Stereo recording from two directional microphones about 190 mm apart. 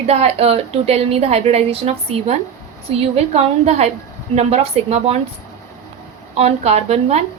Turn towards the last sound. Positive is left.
turn(degrees=-35)  # may be behind; listen again after turning